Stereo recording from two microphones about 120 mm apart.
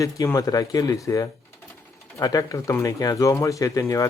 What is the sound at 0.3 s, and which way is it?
Speech, 30° left (ahead or behind).